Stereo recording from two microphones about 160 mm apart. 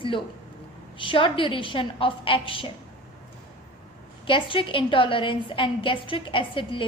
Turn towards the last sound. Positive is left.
turn(degrees=30)  # may be behind; listen again after turning